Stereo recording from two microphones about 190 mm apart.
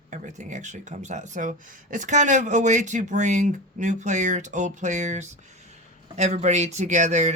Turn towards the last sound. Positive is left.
turn(degrees=-40)  # may be behind; listen again after turning